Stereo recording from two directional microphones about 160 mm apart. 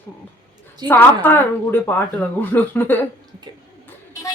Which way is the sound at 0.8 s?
25° right (ahead or behind).